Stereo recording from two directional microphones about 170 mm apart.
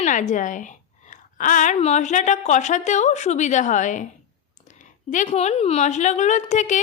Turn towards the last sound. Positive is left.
turn(degrees=45)  # may be behind; listen again after turning